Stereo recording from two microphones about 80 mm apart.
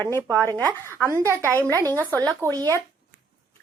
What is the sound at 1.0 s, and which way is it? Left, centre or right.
Speech, right.